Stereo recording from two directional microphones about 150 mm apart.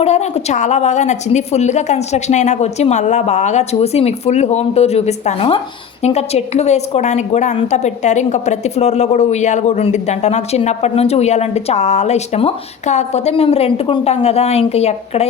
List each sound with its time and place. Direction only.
0.0 s a woman's voice: 45° left (ahead or behind)